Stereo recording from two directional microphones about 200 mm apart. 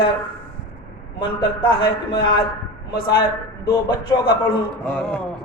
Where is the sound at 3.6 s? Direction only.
25° left (ahead or behind).